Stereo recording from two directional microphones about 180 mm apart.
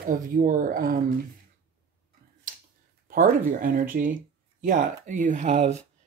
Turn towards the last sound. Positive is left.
turn(degrees=-40)  # may be behind; listen again after turning